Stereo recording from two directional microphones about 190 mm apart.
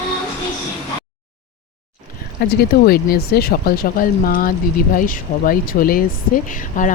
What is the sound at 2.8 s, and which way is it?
Speech, 55° left (ahead or behind).